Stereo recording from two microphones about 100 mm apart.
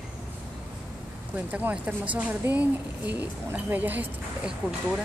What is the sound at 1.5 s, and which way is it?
Speech, 15° right (ahead or behind).